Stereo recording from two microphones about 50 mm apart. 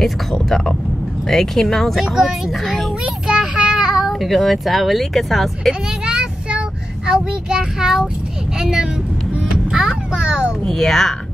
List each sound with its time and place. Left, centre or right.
0.0 s speech: centre
3.0 s child singing: centre
3.5 s speech: centre
5.9 s a sound: centre
7.1 s child singing: centre
8.5 s a child's voice: centre
9.3 s a sound: centre
10.6 s speech: centre